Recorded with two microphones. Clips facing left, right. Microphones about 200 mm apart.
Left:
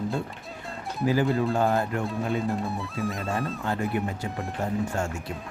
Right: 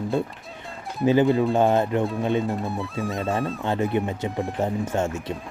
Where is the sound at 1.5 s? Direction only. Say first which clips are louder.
Right 5 dB; 20° right (ahead or behind).